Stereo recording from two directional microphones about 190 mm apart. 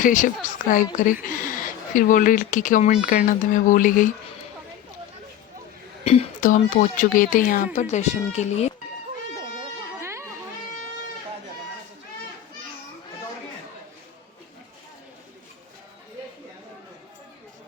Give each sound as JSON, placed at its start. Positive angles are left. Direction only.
{"t": 0.0, "sound": "speech", "side_deg": 45}
{"t": 6.1, "sound": "speech", "side_deg": 40}
{"t": 10.0, "sound": "children playing", "side_deg": -15}